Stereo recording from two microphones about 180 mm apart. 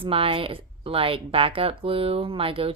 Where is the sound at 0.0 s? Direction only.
30° right (ahead or behind).